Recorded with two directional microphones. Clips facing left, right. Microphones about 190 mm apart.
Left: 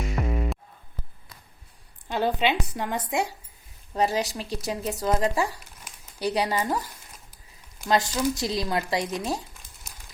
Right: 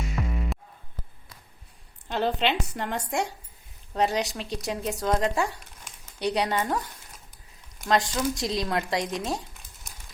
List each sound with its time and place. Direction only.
0.2 s music: 35° left (ahead or behind)
2.0 s speech: 5° left (ahead or behind)
7.9 s speech: 5° left (ahead or behind)